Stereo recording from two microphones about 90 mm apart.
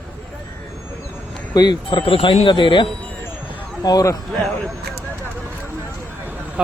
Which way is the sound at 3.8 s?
40° left (ahead or behind).